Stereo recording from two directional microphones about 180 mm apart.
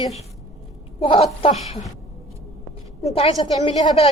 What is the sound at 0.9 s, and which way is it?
Speech, 30° left (ahead or behind).